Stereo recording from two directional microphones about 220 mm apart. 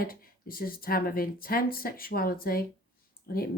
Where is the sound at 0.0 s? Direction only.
40° left (ahead or behind).